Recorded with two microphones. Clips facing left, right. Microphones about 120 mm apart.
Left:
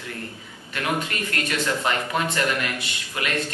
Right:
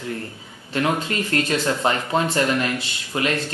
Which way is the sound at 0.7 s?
30° right (ahead or behind).